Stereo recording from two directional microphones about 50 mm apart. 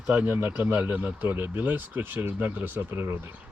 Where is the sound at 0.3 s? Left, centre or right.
Right.